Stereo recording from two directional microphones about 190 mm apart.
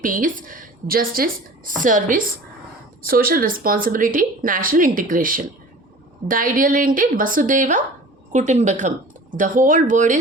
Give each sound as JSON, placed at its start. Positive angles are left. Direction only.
{"t": 0.0, "sound": "a woman's voice", "side_deg": -45}